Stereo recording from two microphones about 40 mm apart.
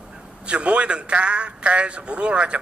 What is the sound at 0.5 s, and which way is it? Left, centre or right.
A man's voice, right.